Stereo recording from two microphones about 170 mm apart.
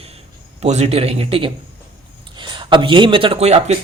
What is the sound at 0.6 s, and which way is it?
Speech, 40° right (ahead or behind).